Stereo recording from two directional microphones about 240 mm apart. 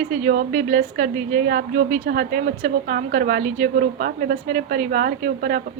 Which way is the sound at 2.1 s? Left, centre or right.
Right.